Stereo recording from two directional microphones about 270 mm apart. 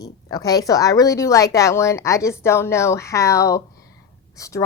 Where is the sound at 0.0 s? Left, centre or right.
Centre.